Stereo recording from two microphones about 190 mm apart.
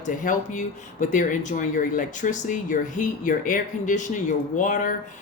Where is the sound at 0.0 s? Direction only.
40° left (ahead or behind).